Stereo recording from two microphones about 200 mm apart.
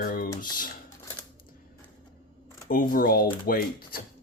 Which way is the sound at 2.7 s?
45° left (ahead or behind).